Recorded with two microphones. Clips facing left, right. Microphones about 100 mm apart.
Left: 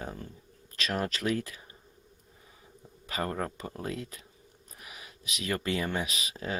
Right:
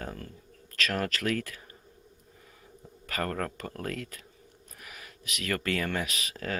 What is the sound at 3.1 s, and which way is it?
Speech, 15° left (ahead or behind).